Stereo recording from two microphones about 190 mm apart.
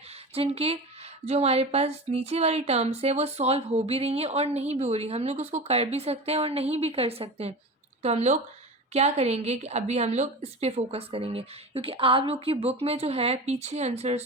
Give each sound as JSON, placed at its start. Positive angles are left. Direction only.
{"t": 0.3, "sound": "speech", "side_deg": -30}